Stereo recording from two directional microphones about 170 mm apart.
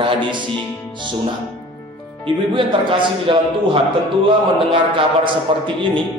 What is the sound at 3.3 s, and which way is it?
Speech, 30° right (ahead or behind).